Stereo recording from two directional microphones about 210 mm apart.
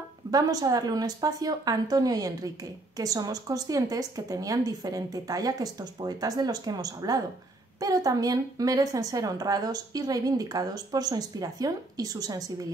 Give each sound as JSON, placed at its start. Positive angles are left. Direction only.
{"t": 0.3, "sound": "a woman's voice", "side_deg": -15}